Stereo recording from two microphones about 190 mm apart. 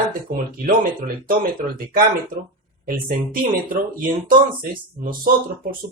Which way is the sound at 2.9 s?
45° right (ahead or behind).